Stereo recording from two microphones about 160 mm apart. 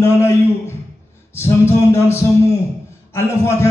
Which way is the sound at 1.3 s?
15° left (ahead or behind).